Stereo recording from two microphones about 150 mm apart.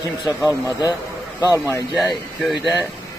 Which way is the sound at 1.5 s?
20° left (ahead or behind).